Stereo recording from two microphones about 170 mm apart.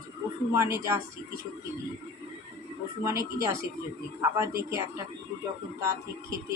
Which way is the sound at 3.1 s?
20° right (ahead or behind).